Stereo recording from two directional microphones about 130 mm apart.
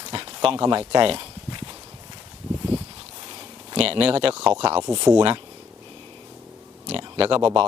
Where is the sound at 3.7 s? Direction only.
45° right (ahead or behind).